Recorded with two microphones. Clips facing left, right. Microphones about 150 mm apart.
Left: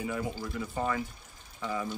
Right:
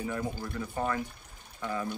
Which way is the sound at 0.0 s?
5° left (ahead or behind).